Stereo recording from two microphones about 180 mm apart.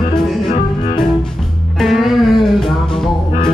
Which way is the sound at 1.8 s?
Centre (ahead or behind).